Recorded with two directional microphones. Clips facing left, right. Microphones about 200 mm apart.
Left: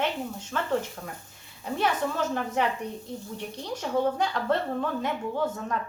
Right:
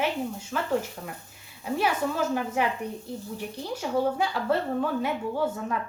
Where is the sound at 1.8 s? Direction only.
5° right (ahead or behind).